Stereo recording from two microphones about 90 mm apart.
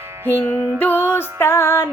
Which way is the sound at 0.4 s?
25° left (ahead or behind).